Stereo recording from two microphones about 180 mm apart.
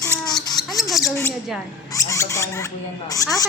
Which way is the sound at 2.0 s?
15° left (ahead or behind).